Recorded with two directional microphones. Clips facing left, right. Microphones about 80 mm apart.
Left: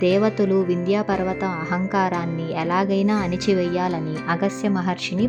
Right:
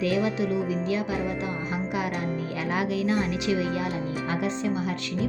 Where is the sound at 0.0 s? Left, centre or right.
Left.